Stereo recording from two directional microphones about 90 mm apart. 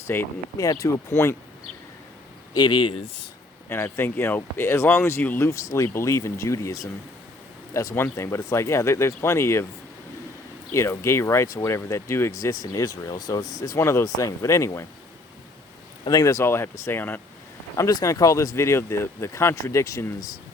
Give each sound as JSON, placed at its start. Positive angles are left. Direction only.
{"t": 0.1, "sound": "speech", "side_deg": 20}
{"t": 0.5, "sound": "speech", "side_deg": 40}
{"t": 1.1, "sound": "speech", "side_deg": 25}
{"t": 2.5, "sound": "speech", "side_deg": 55}
{"t": 3.7, "sound": "speech", "side_deg": 25}
{"t": 5.5, "sound": "speech", "side_deg": 35}
{"t": 10.7, "sound": "speech", "side_deg": 30}
{"t": 16.0, "sound": "speech", "side_deg": 40}
{"t": 17.7, "sound": "speech", "side_deg": 40}